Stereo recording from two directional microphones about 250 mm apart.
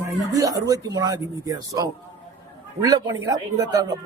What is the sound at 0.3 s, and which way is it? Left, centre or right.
Speech, centre.